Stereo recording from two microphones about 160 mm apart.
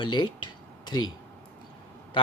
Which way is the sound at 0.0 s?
30° left (ahead or behind).